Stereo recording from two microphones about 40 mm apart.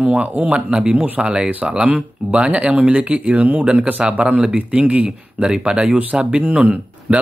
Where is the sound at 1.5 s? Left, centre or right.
Right.